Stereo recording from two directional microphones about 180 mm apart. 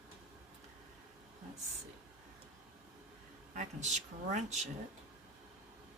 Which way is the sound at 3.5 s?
40° right (ahead or behind).